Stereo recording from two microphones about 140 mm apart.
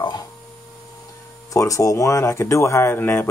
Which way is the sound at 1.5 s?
25° left (ahead or behind).